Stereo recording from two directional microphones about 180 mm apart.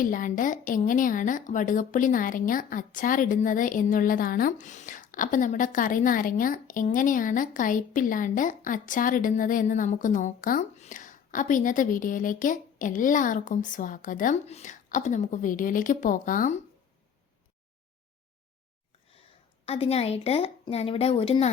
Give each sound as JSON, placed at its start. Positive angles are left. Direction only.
{"t": 0.0, "sound": "a woman's voice", "side_deg": 50}
{"t": 19.6, "sound": "a woman's voice", "side_deg": 35}